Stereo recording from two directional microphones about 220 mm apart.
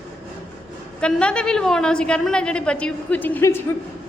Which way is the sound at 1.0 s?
5° left (ahead or behind).